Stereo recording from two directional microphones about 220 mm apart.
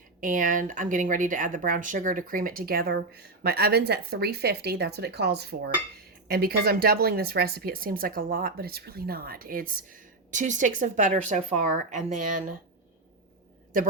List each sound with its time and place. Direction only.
0.2 s speech: 35° right (ahead or behind)